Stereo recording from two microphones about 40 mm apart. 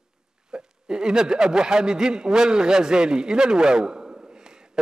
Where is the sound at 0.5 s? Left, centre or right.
Right.